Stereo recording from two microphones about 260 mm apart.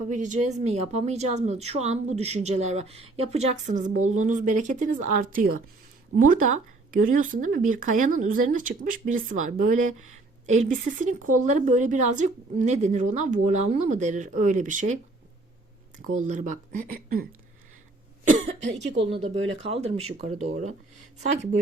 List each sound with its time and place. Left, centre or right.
0.1 s speech: right
16.2 s speech: right
18.3 s speech: right